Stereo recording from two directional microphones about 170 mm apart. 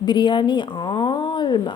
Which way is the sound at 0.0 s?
25° left (ahead or behind).